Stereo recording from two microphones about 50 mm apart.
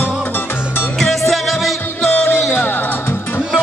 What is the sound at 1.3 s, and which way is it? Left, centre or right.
Music, centre.